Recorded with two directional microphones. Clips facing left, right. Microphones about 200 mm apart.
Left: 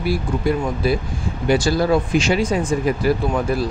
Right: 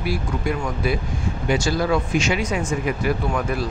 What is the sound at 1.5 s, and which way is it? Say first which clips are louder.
Speech: left 4 dB; 35° left (ahead or behind).